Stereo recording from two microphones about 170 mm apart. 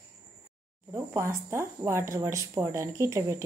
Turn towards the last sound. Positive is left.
turn(degrees=-15)  # may be behind; listen again after turning